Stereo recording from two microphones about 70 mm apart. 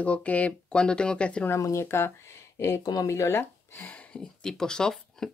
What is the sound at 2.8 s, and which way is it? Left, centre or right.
Speech, left.